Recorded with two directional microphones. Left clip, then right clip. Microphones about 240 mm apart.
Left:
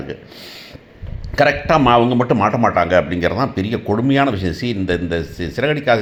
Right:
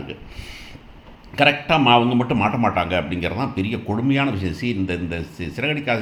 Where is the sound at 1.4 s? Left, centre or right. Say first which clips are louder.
Left 3 dB; left.